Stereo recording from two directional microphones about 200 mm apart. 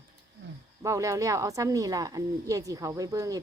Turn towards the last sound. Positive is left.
turn(degrees=-15)  # may be behind; listen again after turning